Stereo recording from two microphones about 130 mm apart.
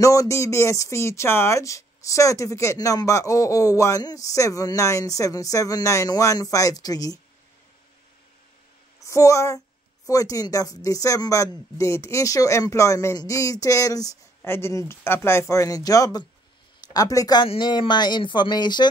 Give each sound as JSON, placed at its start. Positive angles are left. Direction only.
{"t": 0.0, "sound": "speech", "side_deg": 25}
{"t": 9.0, "sound": "speech", "side_deg": 25}